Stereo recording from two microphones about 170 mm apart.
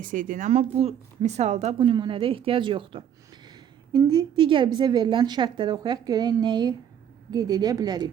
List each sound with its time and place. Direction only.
0.0 s a woman's voice: 50° right (ahead or behind); by 8.1 s 25° right (ahead or behind)